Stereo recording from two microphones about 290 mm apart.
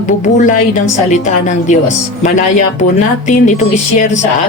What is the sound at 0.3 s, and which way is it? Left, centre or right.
Speech, left.